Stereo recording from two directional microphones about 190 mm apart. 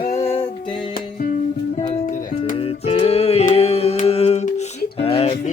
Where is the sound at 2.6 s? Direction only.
30° left (ahead or behind).